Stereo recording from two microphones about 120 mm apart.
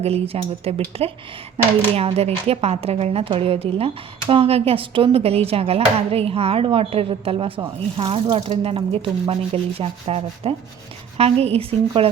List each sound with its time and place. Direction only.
0.0 s a woman's voice: 55° right (ahead or behind)